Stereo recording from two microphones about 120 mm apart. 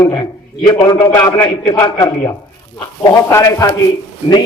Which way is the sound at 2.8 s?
30° left (ahead or behind).